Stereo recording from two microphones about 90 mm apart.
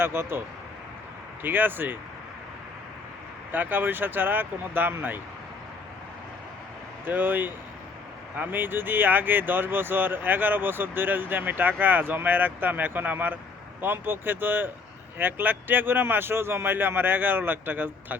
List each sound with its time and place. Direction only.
0.0 s speech: 25° right (ahead or behind)
3.5 s speech: 20° right (ahead or behind)
7.0 s speech: 20° right (ahead or behind)